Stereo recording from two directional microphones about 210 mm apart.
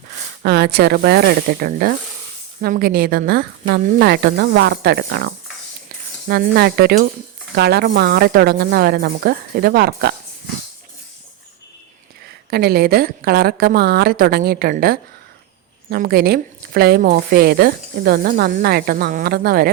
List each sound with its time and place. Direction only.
0.4 s a woman's voice: 50° right (ahead or behind)
12.5 s a woman's voice: 50° right (ahead or behind)